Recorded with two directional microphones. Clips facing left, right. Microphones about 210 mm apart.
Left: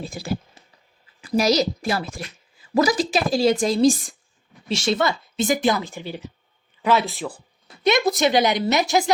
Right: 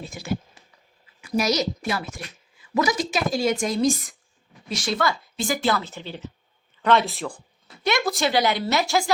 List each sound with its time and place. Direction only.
0.0 s a woman's voice: 35° left (ahead or behind); by 7.4 s 5° left (ahead or behind)
7.9 s a woman's voice: 20° left (ahead or behind)